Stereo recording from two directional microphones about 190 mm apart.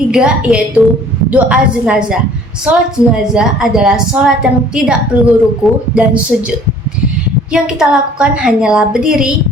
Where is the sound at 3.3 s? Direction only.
5° right (ahead or behind).